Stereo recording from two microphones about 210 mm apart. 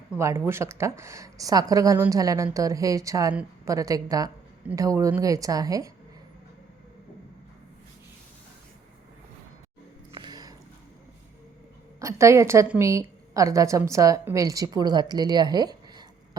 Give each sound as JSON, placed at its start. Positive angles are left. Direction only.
{"t": 0.2, "sound": "speech", "side_deg": -15}
{"t": 10.1, "sound": "a sound", "side_deg": -20}
{"t": 11.9, "sound": "a woman's voice", "side_deg": -15}